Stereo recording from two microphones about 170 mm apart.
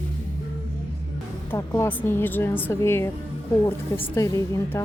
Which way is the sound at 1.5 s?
15° left (ahead or behind).